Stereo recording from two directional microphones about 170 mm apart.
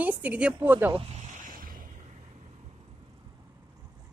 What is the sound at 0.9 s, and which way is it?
Speech, 35° right (ahead or behind).